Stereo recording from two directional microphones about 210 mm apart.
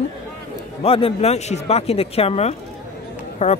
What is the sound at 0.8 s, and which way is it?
Speech, 25° left (ahead or behind).